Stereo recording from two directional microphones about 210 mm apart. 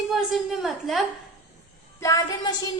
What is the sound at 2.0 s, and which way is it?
Speech, 15° left (ahead or behind).